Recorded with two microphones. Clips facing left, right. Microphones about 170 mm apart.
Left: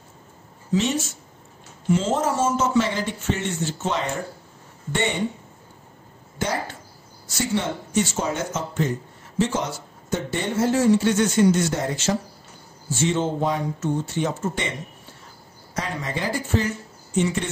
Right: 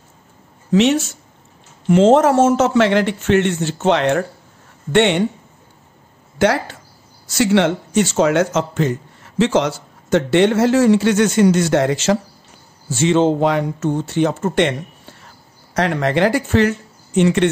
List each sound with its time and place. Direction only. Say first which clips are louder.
0.7 s a man's voice: right 8 dB; 70° right (ahead or behind)
6.3 s a man's voice: right 10 dB; 85° right